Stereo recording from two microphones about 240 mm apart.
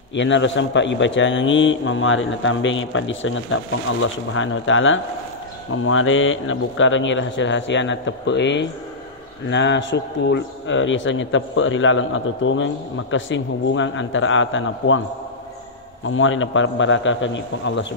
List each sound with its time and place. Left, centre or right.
0.1 s a man's voice: left
16.1 s a man's voice: left